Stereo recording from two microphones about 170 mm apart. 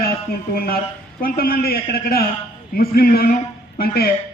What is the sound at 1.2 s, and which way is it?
A man's voice, 60° left (ahead or behind).